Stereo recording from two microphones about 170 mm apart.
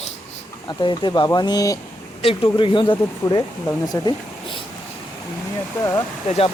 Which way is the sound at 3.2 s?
20° left (ahead or behind).